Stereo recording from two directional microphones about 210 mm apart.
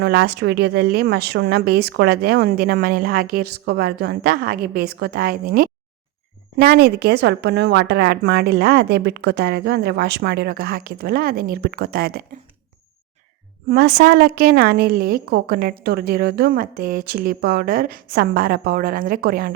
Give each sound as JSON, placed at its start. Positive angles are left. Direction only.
{"t": 0.0, "sound": "a woman's voice", "side_deg": -50}
{"t": 13.7, "sound": "a woman's voice", "side_deg": -50}